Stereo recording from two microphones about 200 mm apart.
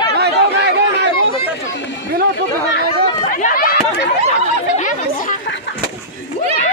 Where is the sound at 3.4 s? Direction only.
45° left (ahead or behind).